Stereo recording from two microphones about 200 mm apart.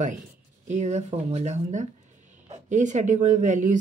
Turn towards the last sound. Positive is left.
turn(degrees=-40)  # may be behind; listen again after turning